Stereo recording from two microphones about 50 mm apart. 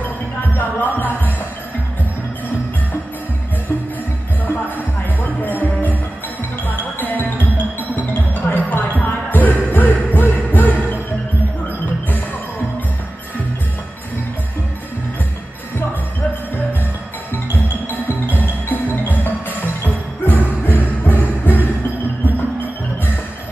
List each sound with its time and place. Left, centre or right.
0.0 s music: left
5.2 s music: left
7.0 s music: left
18.0 s music: left